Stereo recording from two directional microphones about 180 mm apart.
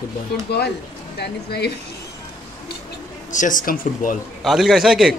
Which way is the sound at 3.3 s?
45° left (ahead or behind).